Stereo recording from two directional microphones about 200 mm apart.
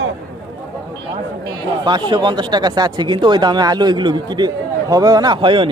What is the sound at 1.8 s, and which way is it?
Speech, 20° right (ahead or behind).